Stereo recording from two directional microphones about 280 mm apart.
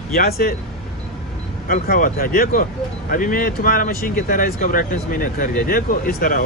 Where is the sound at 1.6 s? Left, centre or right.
Left.